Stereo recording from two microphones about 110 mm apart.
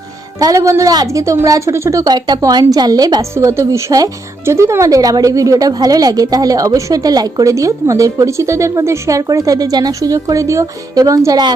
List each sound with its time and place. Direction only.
0.3 s speech: 30° right (ahead or behind)